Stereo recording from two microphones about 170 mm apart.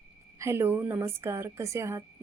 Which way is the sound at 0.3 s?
15° right (ahead or behind).